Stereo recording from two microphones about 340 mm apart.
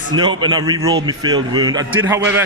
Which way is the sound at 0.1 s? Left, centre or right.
Centre.